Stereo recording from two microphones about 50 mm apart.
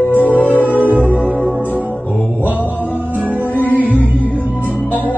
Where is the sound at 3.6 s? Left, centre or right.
Left.